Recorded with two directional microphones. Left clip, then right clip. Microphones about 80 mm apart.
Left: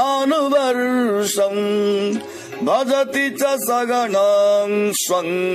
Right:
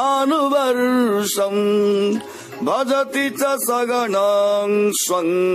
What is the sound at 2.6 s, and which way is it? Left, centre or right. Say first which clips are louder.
Mantra: left 1 dB; right.